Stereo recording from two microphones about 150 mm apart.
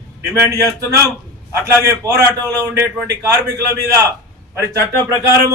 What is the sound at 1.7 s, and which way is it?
Speech, 20° right (ahead or behind).